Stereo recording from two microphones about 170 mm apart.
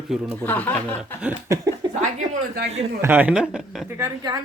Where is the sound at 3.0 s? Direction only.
10° right (ahead or behind).